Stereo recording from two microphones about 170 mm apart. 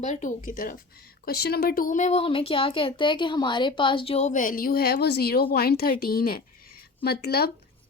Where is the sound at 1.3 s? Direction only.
70° left (ahead or behind).